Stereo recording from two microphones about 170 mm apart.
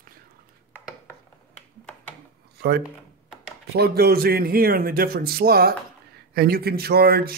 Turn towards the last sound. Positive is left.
turn(degrees=-65)  # may be behind; listen again after turning